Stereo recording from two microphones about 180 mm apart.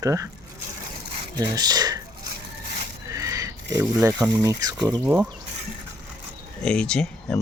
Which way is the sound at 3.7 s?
15° right (ahead or behind).